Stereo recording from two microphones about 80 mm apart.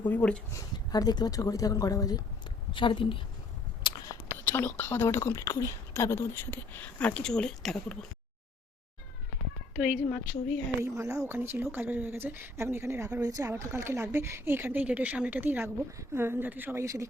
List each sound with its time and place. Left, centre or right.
0.0 s speech: centre
0.5 s speech: left
2.7 s a woman's voice: left
3.9 s a sound: left
4.4 s speech: left
5.0 s speech: left; by 7.9 s centre
9.7 s a woman's voice: centre
10.8 s speech: right
13.2 s speech: right
13.5 s speech: right
16.7 s speech: right